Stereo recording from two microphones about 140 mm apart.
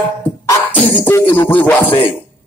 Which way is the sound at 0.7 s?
15° left (ahead or behind).